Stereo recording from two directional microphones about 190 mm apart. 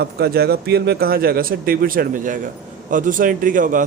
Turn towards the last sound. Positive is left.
turn(degrees=-45)  # may be behind; listen again after turning